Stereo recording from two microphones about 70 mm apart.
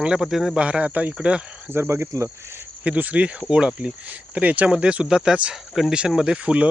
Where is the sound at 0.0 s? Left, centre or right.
Centre.